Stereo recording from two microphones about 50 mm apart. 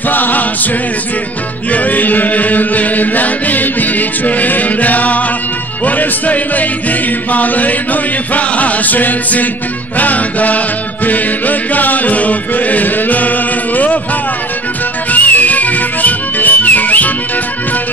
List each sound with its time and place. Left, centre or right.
0.1 s choir: left
1.7 s chant: left
5.9 s music: left
15.0 s music: left